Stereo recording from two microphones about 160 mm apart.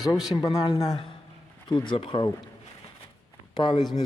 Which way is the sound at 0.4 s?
25° left (ahead or behind).